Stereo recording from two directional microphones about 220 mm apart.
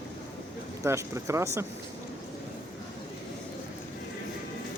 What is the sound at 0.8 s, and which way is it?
Speech, 15° right (ahead or behind).